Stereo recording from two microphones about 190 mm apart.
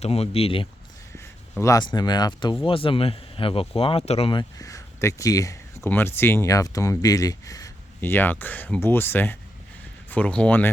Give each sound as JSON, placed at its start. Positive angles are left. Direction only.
{"t": 0.0, "sound": "speech", "side_deg": 30}
{"t": 1.1, "sound": "speech", "side_deg": 15}